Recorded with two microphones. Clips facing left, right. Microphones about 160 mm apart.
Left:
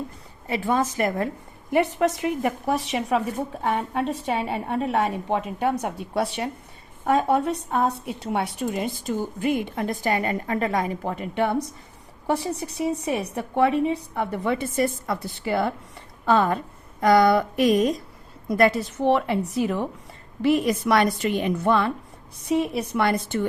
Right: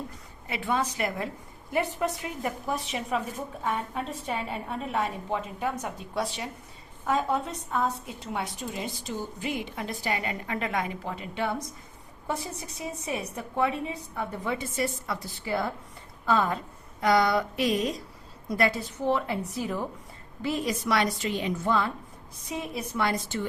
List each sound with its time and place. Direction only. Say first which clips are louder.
0.4 s a woman's voice: left 5 dB; 40° left (ahead or behind)
1.7 s a woman's voice: left 7 dB; 75° left (ahead or behind)
8.6 s a woman's voice: left 8 dB; 55° left (ahead or behind)
12.3 s a woman's voice: left 8 dB; 70° left (ahead or behind)
17.0 s a woman's voice: left 6 dB; 50° left (ahead or behind)